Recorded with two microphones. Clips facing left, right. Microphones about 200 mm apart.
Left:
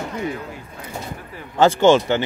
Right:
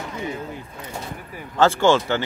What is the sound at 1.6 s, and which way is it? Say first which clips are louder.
Speech: left 3 dB; 20° left (ahead or behind).